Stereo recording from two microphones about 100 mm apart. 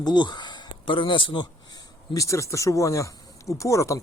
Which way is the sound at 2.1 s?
30° left (ahead or behind).